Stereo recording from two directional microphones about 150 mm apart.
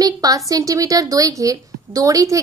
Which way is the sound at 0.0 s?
25° right (ahead or behind).